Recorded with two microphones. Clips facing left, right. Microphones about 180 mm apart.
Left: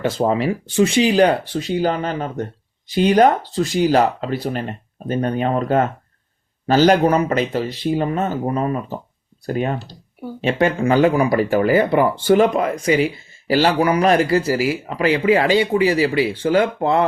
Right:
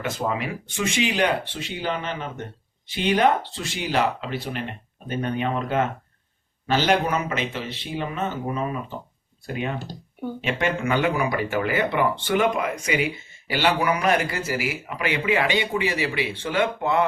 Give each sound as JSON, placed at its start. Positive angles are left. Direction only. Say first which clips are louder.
{"t": 0.0, "sound": "speech", "louder": "left 8 dB", "side_deg": 30}